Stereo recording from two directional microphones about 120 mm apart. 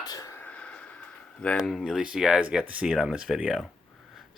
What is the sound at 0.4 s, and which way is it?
Speech, 10° left (ahead or behind).